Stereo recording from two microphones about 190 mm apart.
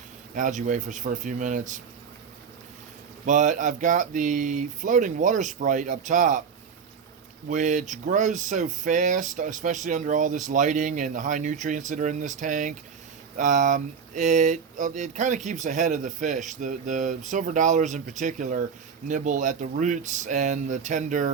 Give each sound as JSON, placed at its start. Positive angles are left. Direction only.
{"t": 0.3, "sound": "speech", "side_deg": -40}
{"t": 3.2, "sound": "speech", "side_deg": -40}
{"t": 7.4, "sound": "speech", "side_deg": -40}